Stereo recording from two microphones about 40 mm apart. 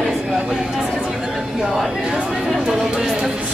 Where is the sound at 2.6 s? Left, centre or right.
Centre.